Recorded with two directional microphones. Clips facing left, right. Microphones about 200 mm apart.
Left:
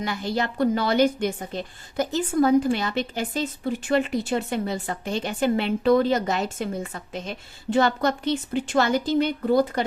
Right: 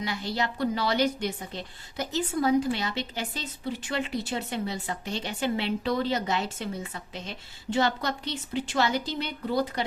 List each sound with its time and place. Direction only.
0.0 s a woman's voice: 50° left (ahead or behind)